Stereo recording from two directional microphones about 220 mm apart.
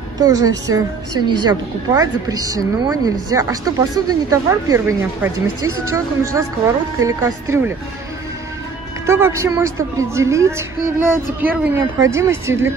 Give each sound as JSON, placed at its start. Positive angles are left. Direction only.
{"t": 0.2, "sound": "a woman's voice", "side_deg": -15}
{"t": 9.0, "sound": "a woman's voice", "side_deg": -10}